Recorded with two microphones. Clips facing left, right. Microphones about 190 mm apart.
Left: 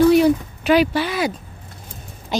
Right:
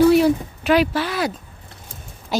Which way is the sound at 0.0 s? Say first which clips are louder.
Left 1 dB; 5° right (ahead or behind).